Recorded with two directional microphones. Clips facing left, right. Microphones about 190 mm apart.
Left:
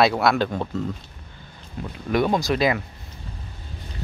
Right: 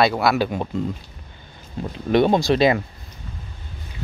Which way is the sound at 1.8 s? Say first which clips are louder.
Right 5 dB; 25° right (ahead or behind).